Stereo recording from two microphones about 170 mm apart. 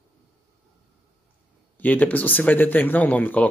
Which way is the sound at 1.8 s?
10° left (ahead or behind).